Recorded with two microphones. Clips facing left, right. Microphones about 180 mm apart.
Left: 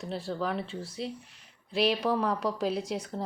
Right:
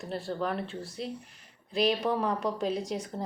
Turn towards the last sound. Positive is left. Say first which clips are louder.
# even
turn(degrees=0)  # may be behind; listen again after turning